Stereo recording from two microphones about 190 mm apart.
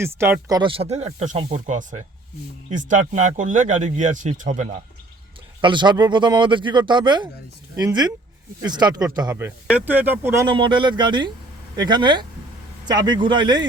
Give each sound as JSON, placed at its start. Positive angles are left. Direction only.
{"t": 0.0, "sound": "speech", "side_deg": -15}
{"t": 0.8, "sound": "speech", "side_deg": -35}
{"t": 5.6, "sound": "speech", "side_deg": -25}
{"t": 10.5, "sound": "speech", "side_deg": -25}